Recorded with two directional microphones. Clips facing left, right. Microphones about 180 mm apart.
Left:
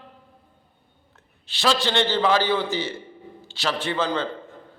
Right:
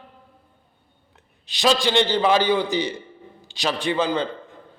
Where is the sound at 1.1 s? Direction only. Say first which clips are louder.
Right 1 dB; 15° right (ahead or behind).